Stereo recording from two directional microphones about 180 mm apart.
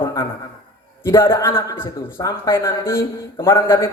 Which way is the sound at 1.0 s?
15° left (ahead or behind).